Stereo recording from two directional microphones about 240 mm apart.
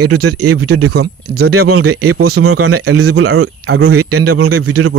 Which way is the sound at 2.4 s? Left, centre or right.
Right.